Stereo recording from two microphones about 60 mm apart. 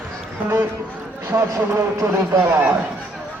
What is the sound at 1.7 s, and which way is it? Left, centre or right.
Speech, right.